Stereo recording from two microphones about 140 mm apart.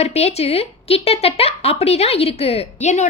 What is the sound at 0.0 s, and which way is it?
Speech, 50° left (ahead or behind).